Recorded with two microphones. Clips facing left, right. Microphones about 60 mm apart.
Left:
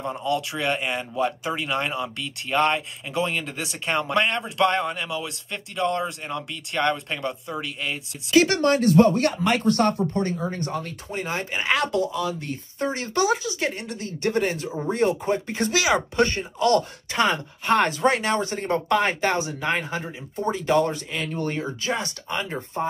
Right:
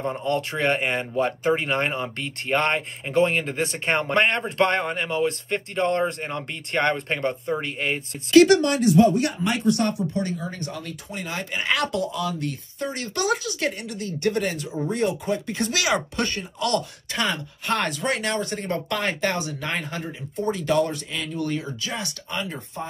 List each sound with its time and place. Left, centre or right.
0.2 s speech: right
8.8 s speech: left
11.5 s speech: centre
12.1 s speech: left
13.2 s speech: centre
13.7 s speech: left
15.7 s speech: centre
16.5 s speech: left
20.6 s speech: left